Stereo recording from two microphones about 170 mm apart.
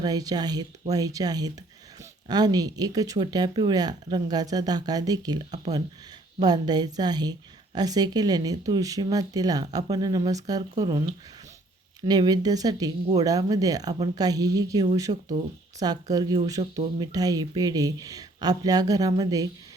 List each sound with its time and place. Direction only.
0.0 s a woman's voice: 20° right (ahead or behind)
12.0 s a woman's voice: 25° right (ahead or behind)